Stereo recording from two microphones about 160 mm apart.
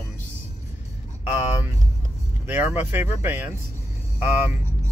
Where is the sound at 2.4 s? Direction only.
15° right (ahead or behind).